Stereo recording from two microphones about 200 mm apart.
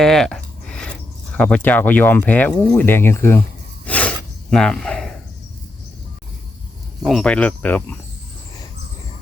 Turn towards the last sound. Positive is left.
turn(degrees=10)  # may be behind; listen again after turning